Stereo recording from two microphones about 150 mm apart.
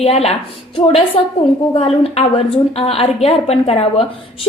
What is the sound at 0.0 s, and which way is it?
Speech, 45° left (ahead or behind).